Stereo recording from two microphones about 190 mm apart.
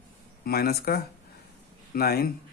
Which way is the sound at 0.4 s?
55° left (ahead or behind).